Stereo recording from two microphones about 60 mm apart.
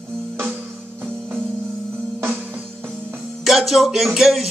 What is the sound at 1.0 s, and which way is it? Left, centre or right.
Music, right.